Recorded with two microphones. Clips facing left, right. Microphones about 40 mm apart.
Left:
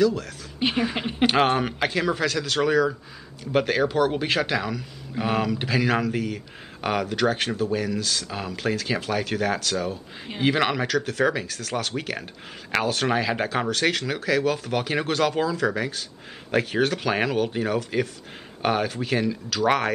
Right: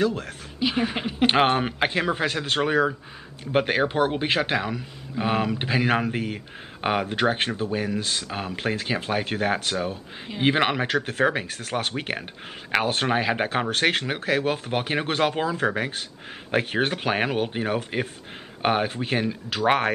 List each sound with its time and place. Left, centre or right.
0.0 s speech: right
0.7 s speech: centre
1.2 s speech: right